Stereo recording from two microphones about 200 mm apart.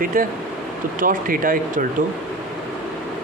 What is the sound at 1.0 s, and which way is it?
Speech, 45° right (ahead or behind).